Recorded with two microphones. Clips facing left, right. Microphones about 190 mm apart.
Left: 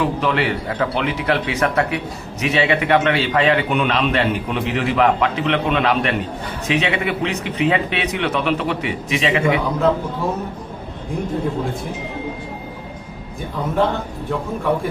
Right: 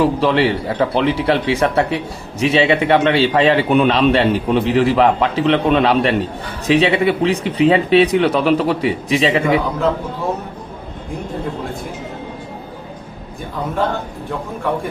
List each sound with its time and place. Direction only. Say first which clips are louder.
0.0 s a man's voice: right 5 dB; 30° right (ahead or behind)